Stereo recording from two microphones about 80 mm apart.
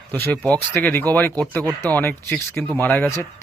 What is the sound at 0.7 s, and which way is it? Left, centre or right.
Speech, left.